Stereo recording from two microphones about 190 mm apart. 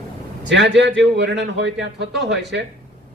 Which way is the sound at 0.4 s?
70° right (ahead or behind).